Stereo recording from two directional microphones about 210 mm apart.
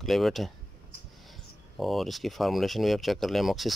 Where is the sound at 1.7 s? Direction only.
Centre (ahead or behind).